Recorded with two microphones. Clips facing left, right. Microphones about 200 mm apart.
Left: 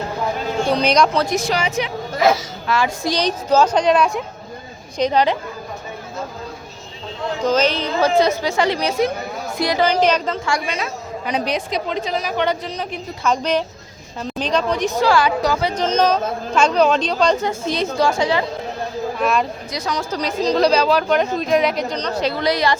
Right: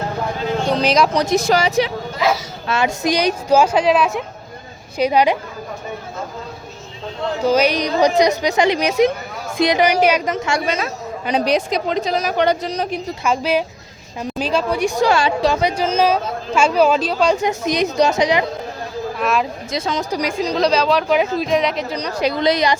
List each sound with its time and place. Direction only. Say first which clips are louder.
0.7 s speech: even; centre (ahead or behind)
1.1 s a woman's voice: right 2 dB; 15° right (ahead or behind)
1.5 s a woman's voice: right 5 dB; 40° right (ahead or behind)
2.6 s a woman's voice: right 2 dB; 20° right (ahead or behind)
7.4 s a woman's voice: right 2 dB; 10° right (ahead or behind)
11.3 s a woman's voice: right 4 dB; 35° right (ahead or behind)
13.2 s a woman's voice: even; 5° right (ahead or behind); by 15.5 s 25° right (ahead or behind)
15.6 s a woman's voice: right 1 dB; 10° right (ahead or behind)
19.2 s speech: even; centre (ahead or behind)
19.7 s a woman's voice: right 3 dB; 25° right (ahead or behind)
20.6 s speech: even; centre (ahead or behind)
21.9 s a woman's voice: right 1 dB; 10° right (ahead or behind)